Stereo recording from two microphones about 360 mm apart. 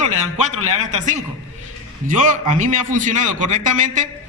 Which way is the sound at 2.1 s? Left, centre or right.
Right.